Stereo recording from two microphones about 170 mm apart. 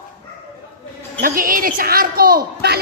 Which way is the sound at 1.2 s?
55° right (ahead or behind).